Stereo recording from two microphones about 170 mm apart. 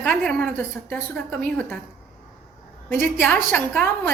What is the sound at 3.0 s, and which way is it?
Speech, 10° left (ahead or behind).